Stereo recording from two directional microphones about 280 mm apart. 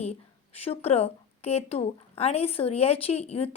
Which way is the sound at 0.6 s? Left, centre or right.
Left.